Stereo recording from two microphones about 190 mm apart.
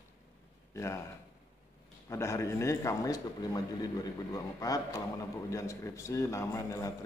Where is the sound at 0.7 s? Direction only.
15° left (ahead or behind).